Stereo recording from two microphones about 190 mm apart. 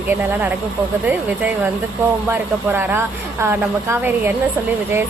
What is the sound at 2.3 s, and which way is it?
Speech, 10° right (ahead or behind).